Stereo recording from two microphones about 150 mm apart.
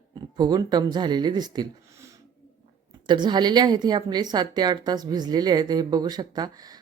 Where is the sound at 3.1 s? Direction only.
30° right (ahead or behind).